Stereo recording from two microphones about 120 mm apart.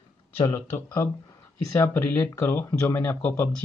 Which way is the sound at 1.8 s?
20° left (ahead or behind).